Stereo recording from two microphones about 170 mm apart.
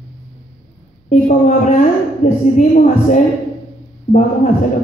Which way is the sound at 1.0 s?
45° left (ahead or behind).